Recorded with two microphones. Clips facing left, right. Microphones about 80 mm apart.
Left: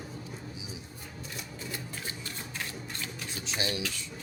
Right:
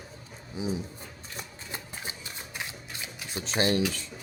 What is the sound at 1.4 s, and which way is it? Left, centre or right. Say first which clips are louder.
Typewriter: right 1 dB; right.